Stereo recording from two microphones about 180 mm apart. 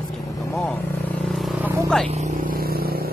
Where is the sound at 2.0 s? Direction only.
40° right (ahead or behind); by 3.1 s 55° right (ahead or behind).